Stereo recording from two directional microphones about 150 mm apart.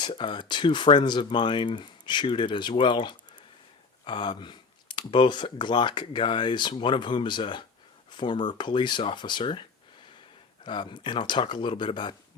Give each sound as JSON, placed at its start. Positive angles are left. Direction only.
{"t": 0.0, "sound": "speech", "side_deg": 30}